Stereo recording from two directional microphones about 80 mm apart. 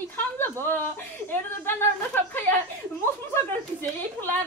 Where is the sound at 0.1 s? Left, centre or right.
Left.